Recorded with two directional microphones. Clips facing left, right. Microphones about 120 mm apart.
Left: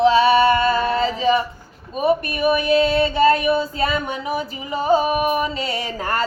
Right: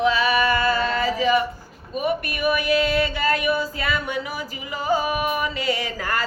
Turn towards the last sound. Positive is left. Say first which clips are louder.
# left 3 dB
turn(degrees=30)  # may be behind; listen again after turning